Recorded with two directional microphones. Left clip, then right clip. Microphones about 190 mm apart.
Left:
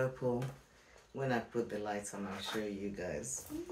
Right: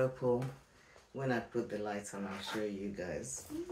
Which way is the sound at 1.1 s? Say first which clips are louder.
Even; 10° left (ahead or behind).